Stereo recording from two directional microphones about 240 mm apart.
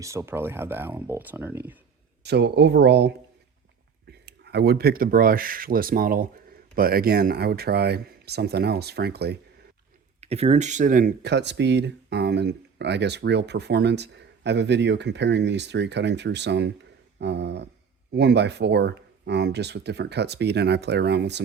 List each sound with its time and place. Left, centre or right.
0.0 s speech: centre
2.2 s speech: right
10.2 s speech: right